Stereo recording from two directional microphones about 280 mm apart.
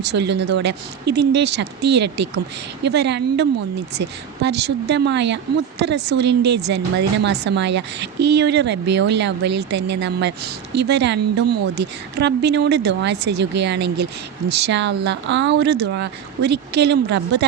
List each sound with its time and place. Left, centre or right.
0.0 s speech: right
4.4 s speech: right